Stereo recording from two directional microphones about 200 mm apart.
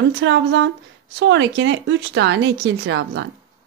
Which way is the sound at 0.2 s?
65° right (ahead or behind).